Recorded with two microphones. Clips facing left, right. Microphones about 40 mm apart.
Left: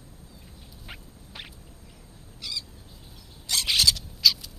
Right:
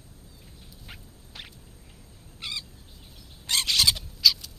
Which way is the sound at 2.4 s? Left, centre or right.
Right.